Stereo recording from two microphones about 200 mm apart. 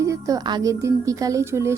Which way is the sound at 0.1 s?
15° right (ahead or behind).